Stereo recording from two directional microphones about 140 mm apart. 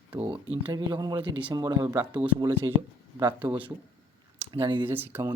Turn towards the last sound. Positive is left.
turn(degrees=-15)  # may be behind; listen again after turning